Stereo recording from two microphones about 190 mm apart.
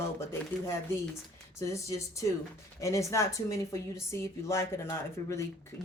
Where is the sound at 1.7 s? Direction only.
15° left (ahead or behind).